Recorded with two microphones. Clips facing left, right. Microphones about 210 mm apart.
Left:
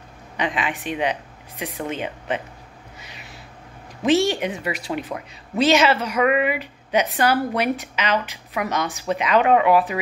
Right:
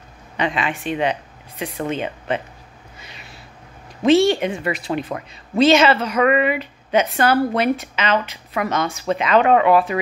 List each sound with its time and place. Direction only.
0.4 s a woman's voice: 15° left (ahead or behind)
4.0 s a woman's voice: 15° left (ahead or behind)